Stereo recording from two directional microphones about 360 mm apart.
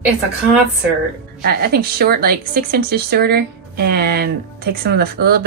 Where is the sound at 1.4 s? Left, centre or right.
Right.